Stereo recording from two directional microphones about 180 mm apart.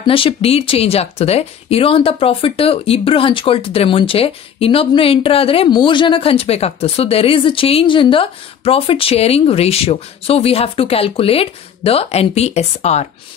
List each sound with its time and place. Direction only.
0.0 s speech: 30° left (ahead or behind)